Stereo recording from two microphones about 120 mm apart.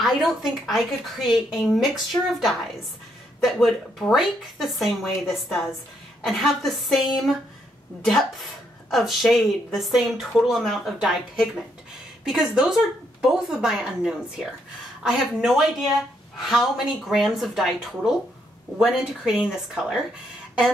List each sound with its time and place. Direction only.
0.0 s a woman's voice: centre (ahead or behind)
2.1 s a woman's voice: 15° left (ahead or behind)
3.4 s a woman's voice: centre (ahead or behind)